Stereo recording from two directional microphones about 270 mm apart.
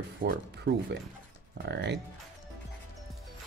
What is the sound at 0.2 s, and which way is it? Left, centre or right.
Speech, right.